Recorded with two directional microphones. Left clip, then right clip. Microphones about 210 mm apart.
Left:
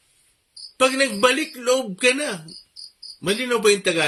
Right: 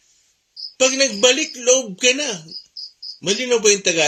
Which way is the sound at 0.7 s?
10° left (ahead or behind).